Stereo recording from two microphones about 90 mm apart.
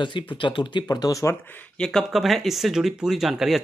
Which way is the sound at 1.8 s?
5° left (ahead or behind).